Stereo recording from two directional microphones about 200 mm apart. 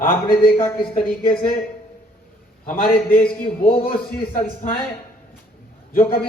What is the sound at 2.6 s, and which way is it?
Speech, 45° left (ahead or behind).